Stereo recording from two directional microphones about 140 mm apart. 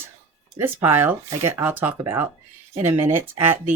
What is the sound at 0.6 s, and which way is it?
Speech, 15° right (ahead or behind).